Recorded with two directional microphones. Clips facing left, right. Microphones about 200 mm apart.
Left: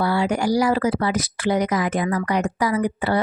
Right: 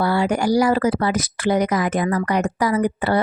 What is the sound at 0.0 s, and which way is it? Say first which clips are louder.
A woman's voice: right 2 dB; 50° right (ahead or behind).